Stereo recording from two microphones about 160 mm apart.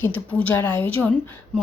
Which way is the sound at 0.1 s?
10° left (ahead or behind).